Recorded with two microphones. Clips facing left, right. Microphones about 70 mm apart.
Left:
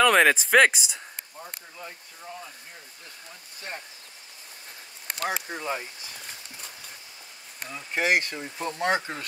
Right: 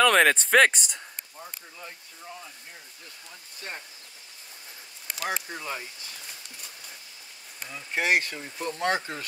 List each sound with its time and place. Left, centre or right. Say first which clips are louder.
0.0 s a sound: left 1 dB; centre
5.3 s speech: left 1 dB; centre
7.7 s speech: left 1 dB; centre
8.4 s speech: left 1 dB; centre